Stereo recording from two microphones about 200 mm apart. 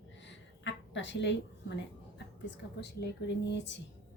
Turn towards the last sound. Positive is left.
turn(degrees=60)  # may be behind; listen again after turning